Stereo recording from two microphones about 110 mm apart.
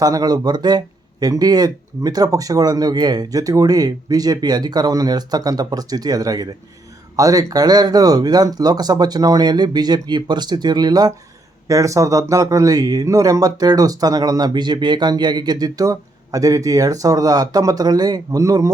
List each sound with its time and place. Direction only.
0.0 s speech: 35° right (ahead or behind)